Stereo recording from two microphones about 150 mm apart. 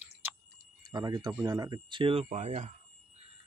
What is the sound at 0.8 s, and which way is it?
Speech, 25° right (ahead or behind).